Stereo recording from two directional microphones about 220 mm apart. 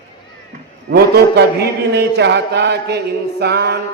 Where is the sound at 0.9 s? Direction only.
45° right (ahead or behind).